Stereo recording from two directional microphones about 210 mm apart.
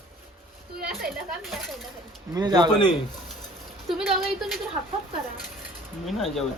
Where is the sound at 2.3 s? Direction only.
20° right (ahead or behind).